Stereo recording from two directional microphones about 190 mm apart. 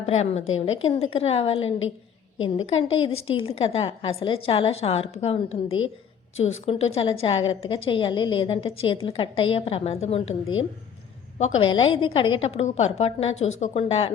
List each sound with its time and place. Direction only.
0.0 s a woman's voice: 35° left (ahead or behind)
2.8 s a woman's voice: 30° left (ahead or behind)
11.6 s a woman's voice: 25° left (ahead or behind)